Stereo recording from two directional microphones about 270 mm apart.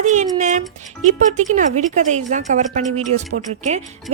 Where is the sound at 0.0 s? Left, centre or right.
Right.